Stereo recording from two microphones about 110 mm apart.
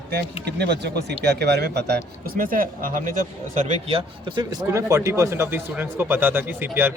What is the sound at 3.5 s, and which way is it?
Speech, 90° right.